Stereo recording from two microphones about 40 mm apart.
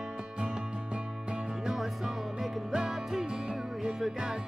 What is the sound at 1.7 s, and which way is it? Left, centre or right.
Music, centre.